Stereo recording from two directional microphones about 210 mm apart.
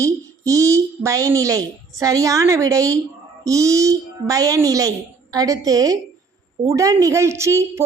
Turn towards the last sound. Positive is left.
turn(degrees=-15)  # may be behind; listen again after turning